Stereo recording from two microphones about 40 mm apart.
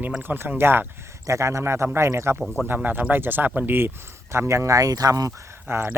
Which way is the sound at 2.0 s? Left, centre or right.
Right.